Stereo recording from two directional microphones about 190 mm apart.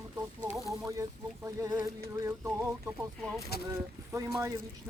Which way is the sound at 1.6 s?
20° right (ahead or behind).